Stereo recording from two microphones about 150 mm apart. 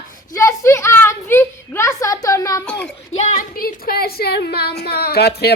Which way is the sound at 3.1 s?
50° left (ahead or behind).